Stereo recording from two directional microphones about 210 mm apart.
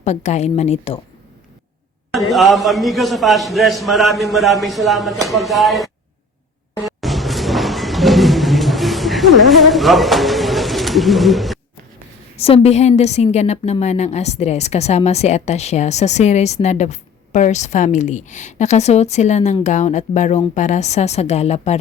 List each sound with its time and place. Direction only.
0.0 s speech: 35° left (ahead or behind)
2.1 s a man's voice: centre (ahead or behind)
6.8 s a sound: centre (ahead or behind)
12.4 s speech: 30° left (ahead or behind)